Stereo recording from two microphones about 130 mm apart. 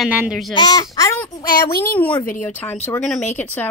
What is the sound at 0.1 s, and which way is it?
Speech, 10° right (ahead or behind).